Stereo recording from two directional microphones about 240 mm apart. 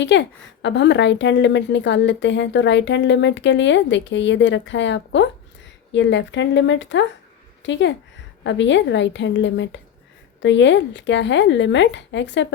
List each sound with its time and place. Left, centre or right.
0.0 s a woman's voice: left